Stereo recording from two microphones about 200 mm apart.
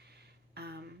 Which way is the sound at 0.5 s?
55° right (ahead or behind).